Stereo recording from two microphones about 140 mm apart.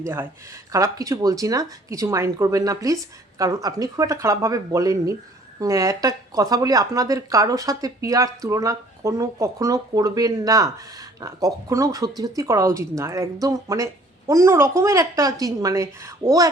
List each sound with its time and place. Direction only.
0.0 s speech: 15° right (ahead or behind)